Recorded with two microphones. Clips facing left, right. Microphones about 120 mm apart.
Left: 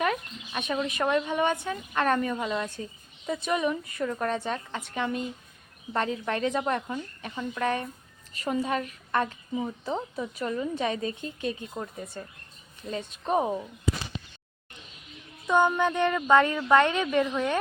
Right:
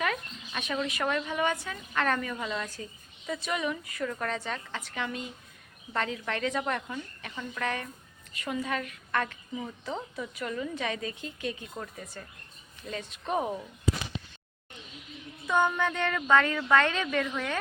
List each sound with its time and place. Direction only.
0.0 s a woman's voice: 20° left (ahead or behind)
15.4 s a woman's voice: 20° left (ahead or behind)